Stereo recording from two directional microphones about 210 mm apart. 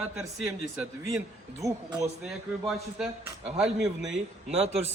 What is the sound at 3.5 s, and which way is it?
Speech, 5° right (ahead or behind).